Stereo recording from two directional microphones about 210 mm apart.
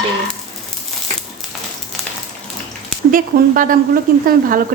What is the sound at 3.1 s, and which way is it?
Speech, 40° right (ahead or behind).